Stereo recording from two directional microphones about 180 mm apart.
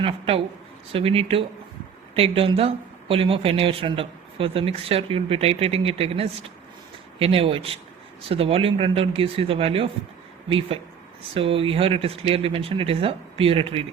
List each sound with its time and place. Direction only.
0.0 s speech: 30° right (ahead or behind)
11.3 s speech: 30° right (ahead or behind)